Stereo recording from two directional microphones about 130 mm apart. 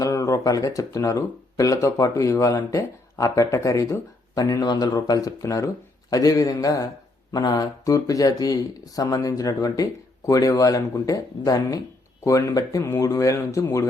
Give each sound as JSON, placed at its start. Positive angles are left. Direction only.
{"t": 0.0, "sound": "speech", "side_deg": 25}